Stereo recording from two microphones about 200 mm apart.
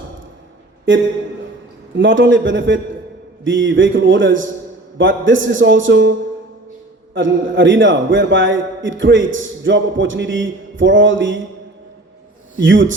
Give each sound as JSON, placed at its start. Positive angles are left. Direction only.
{"t": 2.0, "sound": "a man's voice", "side_deg": -70}
{"t": 12.5, "sound": "a man's voice", "side_deg": -70}